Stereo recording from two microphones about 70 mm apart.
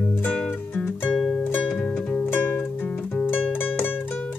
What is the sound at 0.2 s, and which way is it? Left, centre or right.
Music, centre.